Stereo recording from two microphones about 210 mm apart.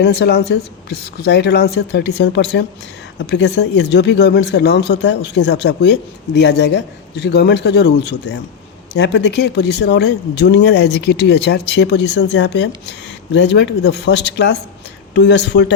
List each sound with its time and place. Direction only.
0.0 s speech: 50° left (ahead or behind)